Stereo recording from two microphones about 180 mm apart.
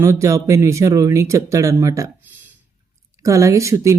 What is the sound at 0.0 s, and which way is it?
Speech, 15° right (ahead or behind).